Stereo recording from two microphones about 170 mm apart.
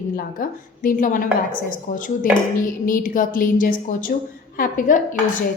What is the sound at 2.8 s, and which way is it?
A woman's voice, 55° left (ahead or behind).